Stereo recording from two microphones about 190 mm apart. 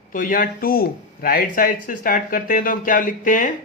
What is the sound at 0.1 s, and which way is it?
Speech, 45° left (ahead or behind).